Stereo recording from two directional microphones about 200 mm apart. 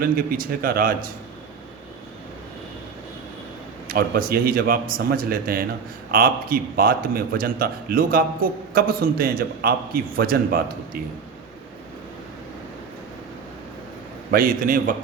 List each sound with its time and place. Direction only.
0.0 s a man's voice: 45° right (ahead or behind)
3.8 s a man's voice: 45° right (ahead or behind)
14.3 s a man's voice: 45° right (ahead or behind)